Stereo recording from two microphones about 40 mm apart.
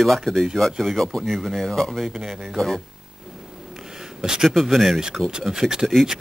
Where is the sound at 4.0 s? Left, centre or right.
Centre.